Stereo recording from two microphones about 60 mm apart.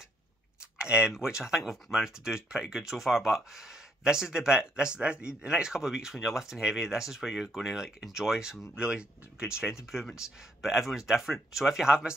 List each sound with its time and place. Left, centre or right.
0.7 s speech: centre